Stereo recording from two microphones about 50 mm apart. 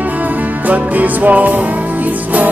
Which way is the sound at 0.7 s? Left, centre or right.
Right.